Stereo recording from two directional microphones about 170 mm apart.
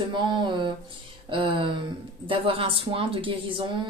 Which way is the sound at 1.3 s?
30° right (ahead or behind).